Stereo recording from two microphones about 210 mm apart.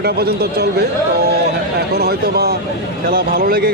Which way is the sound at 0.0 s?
50° right (ahead or behind).